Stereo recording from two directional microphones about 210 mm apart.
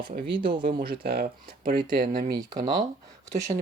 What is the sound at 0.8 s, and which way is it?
Speech, 45° right (ahead or behind).